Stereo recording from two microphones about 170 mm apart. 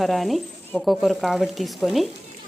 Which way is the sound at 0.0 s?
Centre (ahead or behind).